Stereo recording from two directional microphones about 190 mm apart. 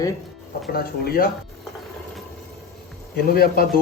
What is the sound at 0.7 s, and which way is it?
Speech, 50° left (ahead or behind).